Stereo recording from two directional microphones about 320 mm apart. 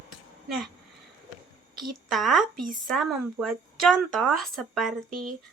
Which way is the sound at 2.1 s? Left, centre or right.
Centre.